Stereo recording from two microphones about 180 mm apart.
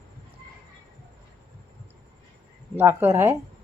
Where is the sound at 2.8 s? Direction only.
10° right (ahead or behind).